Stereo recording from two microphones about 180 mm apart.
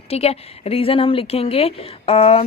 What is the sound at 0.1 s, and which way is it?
Speech, 35° left (ahead or behind).